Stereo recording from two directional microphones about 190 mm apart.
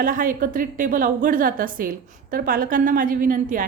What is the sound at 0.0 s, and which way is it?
A woman's voice, 45° right (ahead or behind).